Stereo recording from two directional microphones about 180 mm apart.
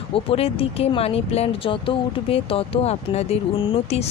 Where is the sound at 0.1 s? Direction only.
30° left (ahead or behind).